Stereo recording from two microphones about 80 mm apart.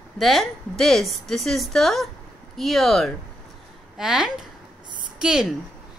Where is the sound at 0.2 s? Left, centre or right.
Centre.